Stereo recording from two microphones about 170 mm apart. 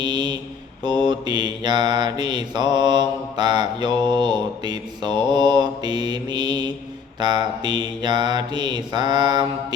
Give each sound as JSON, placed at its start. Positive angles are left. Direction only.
{"t": 0.0, "sound": "mantra", "side_deg": -25}